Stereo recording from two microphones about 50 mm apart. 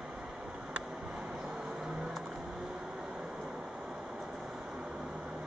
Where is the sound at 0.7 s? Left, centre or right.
Centre.